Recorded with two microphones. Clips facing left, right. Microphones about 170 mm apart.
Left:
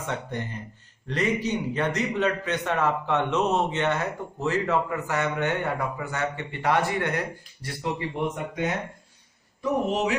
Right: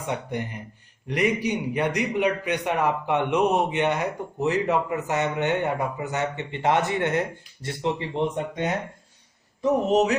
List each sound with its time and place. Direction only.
0.0 s a man's voice: 15° right (ahead or behind)
9.6 s a man's voice: 40° right (ahead or behind)